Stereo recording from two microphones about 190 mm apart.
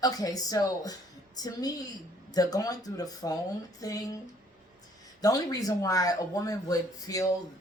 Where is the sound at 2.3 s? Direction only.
20° left (ahead or behind).